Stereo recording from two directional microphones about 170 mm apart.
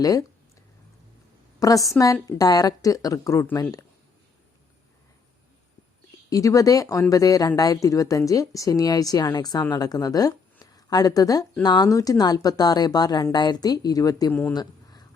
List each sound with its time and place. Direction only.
0.0 s a woman's voice: 20° left (ahead or behind)
1.5 s a woman's voice: 20° left (ahead or behind)
6.3 s a woman's voice: 20° left (ahead or behind)
14.5 s a sound: 25° left (ahead or behind)